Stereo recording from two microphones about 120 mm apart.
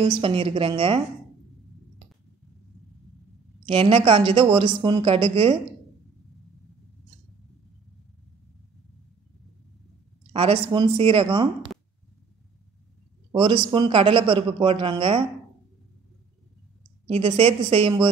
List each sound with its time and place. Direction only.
0.0 s a woman's voice: 45° right (ahead or behind)
3.6 s a woman's voice: 55° right (ahead or behind)
10.3 s a woman's voice: 50° right (ahead or behind)
13.3 s a woman's voice: 45° right (ahead or behind)
17.1 s a woman's voice: 55° right (ahead or behind)